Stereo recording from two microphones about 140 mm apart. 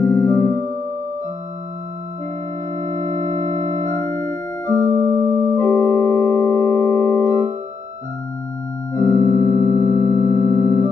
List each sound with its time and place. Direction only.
0.0 s music: 20° left (ahead or behind)
0.4 s music: 80° right
3.3 s keyboard: 25° left (ahead or behind)
4.8 s music: 25° right (ahead or behind)
5.6 s organ: 20° left (ahead or behind)
8.9 s keyboard: 25° left (ahead or behind)
9.3 s singing bowl: 25° left (ahead or behind)